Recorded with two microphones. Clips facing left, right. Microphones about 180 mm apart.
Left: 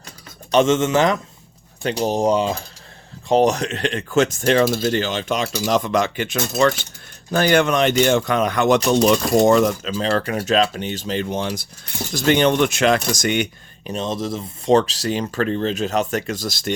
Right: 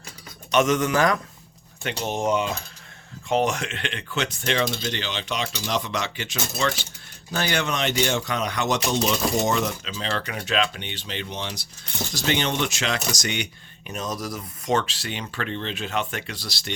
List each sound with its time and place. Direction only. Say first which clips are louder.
0.5 s speech: left 5 dB; 25° left (ahead or behind)
1.8 s speech: left 7 dB; 35° left (ahead or behind); by 13.5 s 50° left (ahead or behind)
13.8 s speech: left 6 dB; 30° left (ahead or behind); by 16.7 s 45° left (ahead or behind)